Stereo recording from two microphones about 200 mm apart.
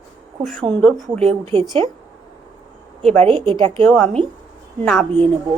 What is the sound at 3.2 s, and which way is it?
Speech, 25° right (ahead or behind).